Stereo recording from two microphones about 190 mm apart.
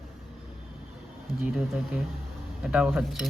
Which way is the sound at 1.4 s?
5° right (ahead or behind).